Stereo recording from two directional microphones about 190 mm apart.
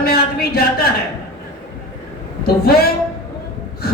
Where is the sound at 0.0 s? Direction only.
55° left (ahead or behind).